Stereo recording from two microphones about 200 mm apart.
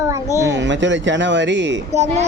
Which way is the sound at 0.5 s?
65° right (ahead or behind).